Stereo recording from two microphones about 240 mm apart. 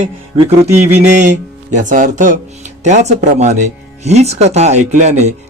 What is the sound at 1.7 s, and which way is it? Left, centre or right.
Speech, right.